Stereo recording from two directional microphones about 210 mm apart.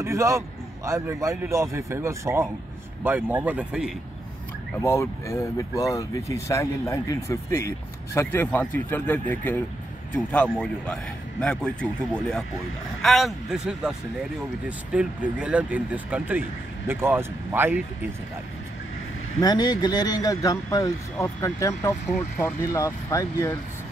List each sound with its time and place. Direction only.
0.0 s speech: 15° right (ahead or behind)
4.8 s a man's voice: 15° left (ahead or behind); by 17.8 s 10° right (ahead or behind)
19.4 s speech: 20° left (ahead or behind)